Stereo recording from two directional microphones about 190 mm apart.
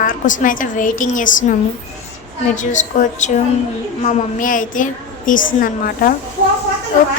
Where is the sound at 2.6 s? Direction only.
40° left (ahead or behind).